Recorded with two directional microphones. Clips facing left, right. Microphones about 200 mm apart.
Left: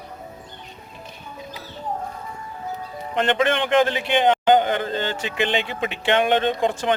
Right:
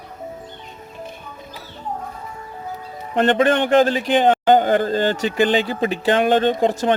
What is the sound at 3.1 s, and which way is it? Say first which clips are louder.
A man's voice: right 5 dB; 35° right (ahead or behind).